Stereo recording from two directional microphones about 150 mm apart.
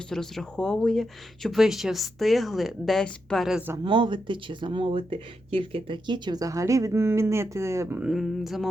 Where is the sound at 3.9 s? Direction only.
35° right (ahead or behind); by 8.0 s 15° right (ahead or behind).